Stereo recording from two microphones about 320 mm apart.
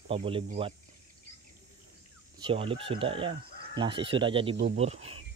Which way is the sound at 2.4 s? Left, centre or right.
Centre.